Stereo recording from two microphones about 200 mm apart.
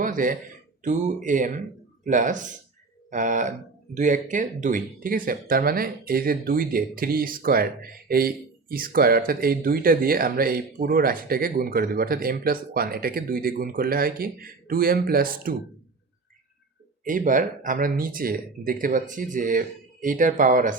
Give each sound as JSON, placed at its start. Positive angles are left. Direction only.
{"t": 0.0, "sound": "a man's voice", "side_deg": -40}
{"t": 17.0, "sound": "speech", "side_deg": -40}